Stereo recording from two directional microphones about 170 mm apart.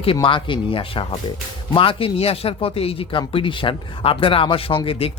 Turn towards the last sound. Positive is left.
turn(degrees=35)  # may be behind; listen again after turning